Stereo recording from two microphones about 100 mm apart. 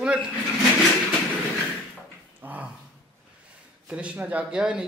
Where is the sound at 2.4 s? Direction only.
20° right (ahead or behind).